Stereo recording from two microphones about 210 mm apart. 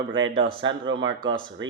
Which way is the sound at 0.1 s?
65° right (ahead or behind).